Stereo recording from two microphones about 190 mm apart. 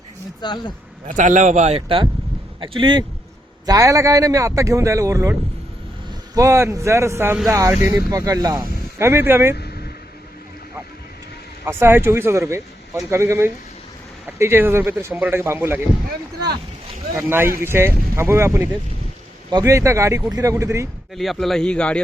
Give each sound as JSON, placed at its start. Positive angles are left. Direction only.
{"t": 0.4, "sound": "speech", "side_deg": 25}
{"t": 1.0, "sound": "a man's voice", "side_deg": -40}
{"t": 9.6, "sound": "vehicle", "side_deg": 55}
{"t": 11.6, "sound": "a man's voice", "side_deg": -10}
{"t": 17.2, "sound": "a man's voice", "side_deg": -10}
{"t": 21.2, "sound": "a man's voice", "side_deg": 0}